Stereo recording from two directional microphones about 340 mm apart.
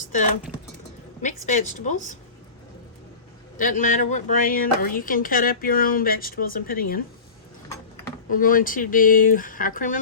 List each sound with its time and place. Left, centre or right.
1.5 s speech: left
3.6 s speech: left
8.3 s speech: left